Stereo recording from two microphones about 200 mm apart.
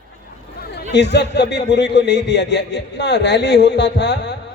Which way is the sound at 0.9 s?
60° left (ahead or behind).